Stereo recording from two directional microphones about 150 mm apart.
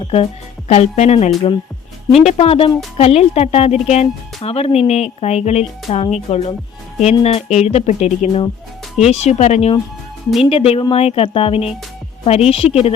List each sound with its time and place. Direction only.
0.0 s speech: 40° left (ahead or behind)